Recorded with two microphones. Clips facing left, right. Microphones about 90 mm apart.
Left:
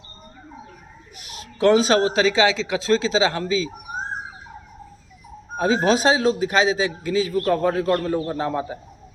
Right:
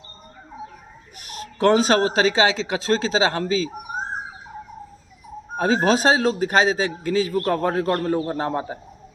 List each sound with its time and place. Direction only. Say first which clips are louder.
1.2 s a man's voice: left 1 dB; 50° right (ahead or behind)
5.5 s a man's voice: even; 45° right (ahead or behind)